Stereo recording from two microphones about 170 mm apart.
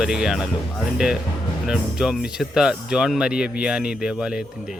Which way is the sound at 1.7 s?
5° right (ahead or behind).